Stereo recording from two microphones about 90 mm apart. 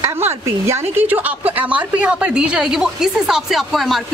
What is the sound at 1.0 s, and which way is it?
A woman's voice, 15° right (ahead or behind).